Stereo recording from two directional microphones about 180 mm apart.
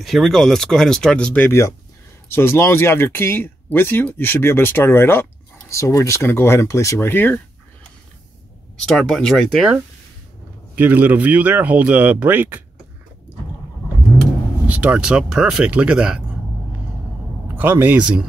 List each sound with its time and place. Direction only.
0.0 s speech: centre (ahead or behind)
8.8 s speech: 5° left (ahead or behind)
10.8 s speech: 10° right (ahead or behind)
14.7 s speech: 5° right (ahead or behind)
17.6 s speech: 10° right (ahead or behind)